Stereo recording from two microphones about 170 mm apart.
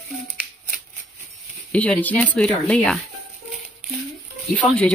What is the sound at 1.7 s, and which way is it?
Speech, 10° left (ahead or behind).